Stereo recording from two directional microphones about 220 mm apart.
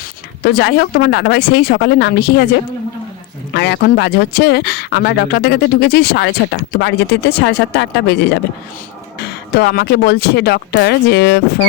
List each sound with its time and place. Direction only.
0.4 s speech: 50° left (ahead or behind)
3.5 s speech: 50° left (ahead or behind)